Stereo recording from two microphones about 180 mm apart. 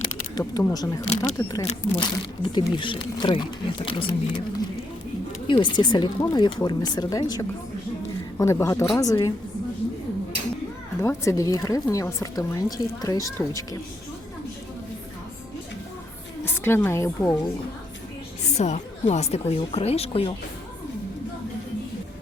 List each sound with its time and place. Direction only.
0.0 s a sound: 20° left (ahead or behind)
0.6 s speech: 20° left (ahead or behind)
11.0 s speech: 15° left (ahead or behind)
16.4 s a woman's voice: 15° left (ahead or behind)
18.4 s speech: 40° left (ahead or behind)